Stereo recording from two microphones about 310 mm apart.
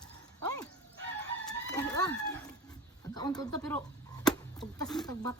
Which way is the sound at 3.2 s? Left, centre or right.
Centre.